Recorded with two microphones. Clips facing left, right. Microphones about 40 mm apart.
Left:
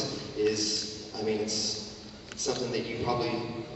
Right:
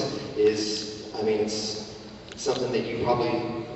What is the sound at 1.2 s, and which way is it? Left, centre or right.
A man's voice, centre.